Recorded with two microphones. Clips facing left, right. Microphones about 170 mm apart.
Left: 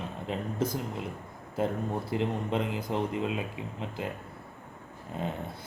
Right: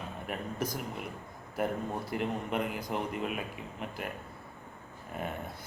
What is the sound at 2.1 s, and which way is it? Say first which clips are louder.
Speech: left 3 dB; 25° left (ahead or behind).